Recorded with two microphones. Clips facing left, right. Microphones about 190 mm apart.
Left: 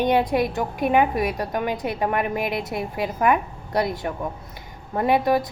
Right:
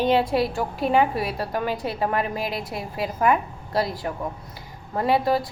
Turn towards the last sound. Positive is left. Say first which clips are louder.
# left 2 dB
turn(degrees=20)  # may be behind; listen again after turning